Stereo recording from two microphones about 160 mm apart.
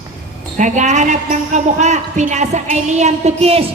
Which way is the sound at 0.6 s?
50° right (ahead or behind).